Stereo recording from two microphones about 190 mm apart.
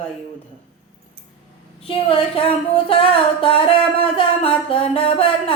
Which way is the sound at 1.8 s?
30° left (ahead or behind).